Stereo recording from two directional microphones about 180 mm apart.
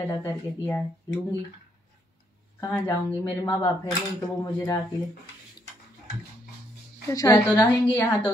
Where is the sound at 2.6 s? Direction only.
15° left (ahead or behind).